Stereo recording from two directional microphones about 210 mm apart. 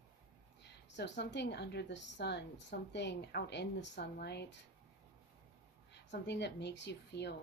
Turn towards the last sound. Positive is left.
turn(degrees=55)  # may be behind; listen again after turning